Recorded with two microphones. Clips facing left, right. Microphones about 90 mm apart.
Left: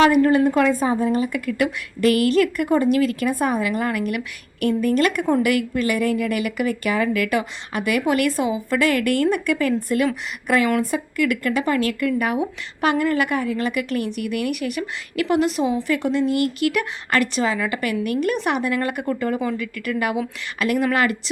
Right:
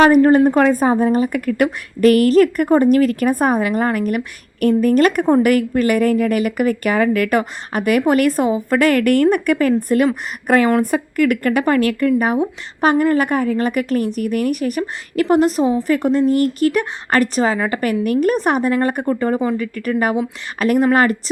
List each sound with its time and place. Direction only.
0.0 s a woman's voice: 40° right (ahead or behind)